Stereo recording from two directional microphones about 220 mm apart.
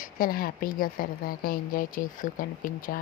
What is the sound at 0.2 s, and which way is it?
Speech, 40° left (ahead or behind).